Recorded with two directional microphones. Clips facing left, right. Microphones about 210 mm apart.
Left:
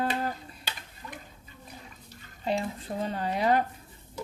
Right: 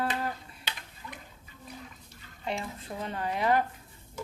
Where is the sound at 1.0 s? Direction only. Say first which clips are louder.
Left 2 dB; 40° left (ahead or behind).